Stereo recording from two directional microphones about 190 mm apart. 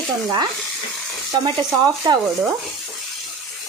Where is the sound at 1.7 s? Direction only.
15° right (ahead or behind).